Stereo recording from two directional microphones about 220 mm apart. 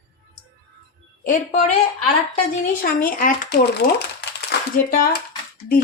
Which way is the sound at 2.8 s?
40° left (ahead or behind).